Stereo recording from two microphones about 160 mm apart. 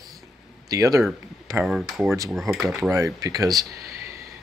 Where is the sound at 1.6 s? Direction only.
Centre (ahead or behind).